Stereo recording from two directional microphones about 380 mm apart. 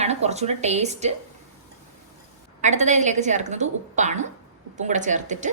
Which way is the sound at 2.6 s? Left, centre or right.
Centre.